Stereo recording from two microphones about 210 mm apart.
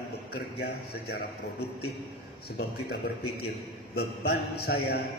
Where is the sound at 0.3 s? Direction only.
50° left (ahead or behind).